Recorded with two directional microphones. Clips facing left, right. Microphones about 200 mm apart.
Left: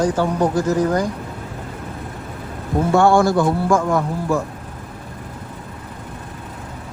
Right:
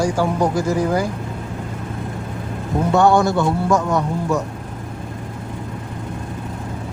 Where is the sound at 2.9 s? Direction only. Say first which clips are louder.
Left 1 dB; 20° right (ahead or behind).